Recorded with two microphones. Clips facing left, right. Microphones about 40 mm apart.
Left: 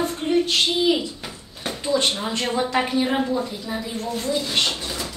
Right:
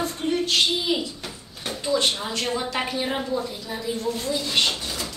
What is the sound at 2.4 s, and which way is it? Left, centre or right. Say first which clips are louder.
A woman's voice: left 5 dB; centre.